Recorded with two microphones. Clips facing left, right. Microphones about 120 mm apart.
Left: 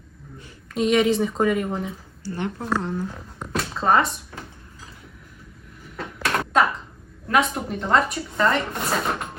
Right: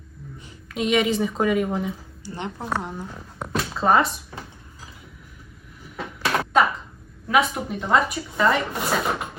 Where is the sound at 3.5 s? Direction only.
Centre (ahead or behind).